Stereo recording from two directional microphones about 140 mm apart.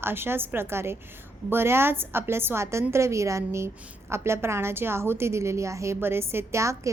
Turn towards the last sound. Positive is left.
turn(degrees=-20)  # may be behind; listen again after turning